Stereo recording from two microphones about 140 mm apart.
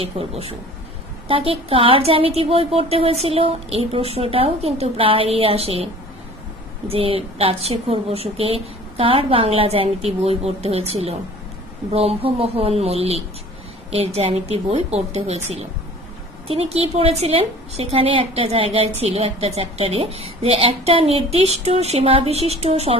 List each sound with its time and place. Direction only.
0.0 s a woman's voice: 45° right (ahead or behind)
6.9 s a woman's voice: 45° right (ahead or behind)